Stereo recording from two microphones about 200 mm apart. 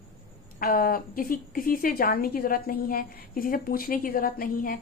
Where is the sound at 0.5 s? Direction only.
45° left (ahead or behind).